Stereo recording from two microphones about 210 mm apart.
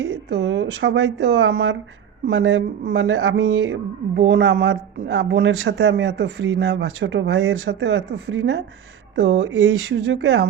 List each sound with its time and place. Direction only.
0.0 s speech: 55° right (ahead or behind)